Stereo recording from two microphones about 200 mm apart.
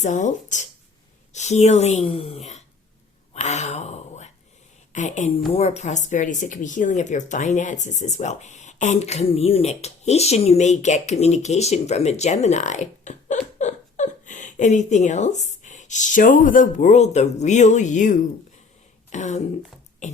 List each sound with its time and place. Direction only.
0.0 s a woman's voice: 40° left (ahead or behind)
20.0 s beatboxing: 35° left (ahead or behind)